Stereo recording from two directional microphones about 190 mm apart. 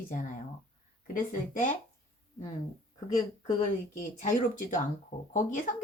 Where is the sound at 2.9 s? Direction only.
25° left (ahead or behind).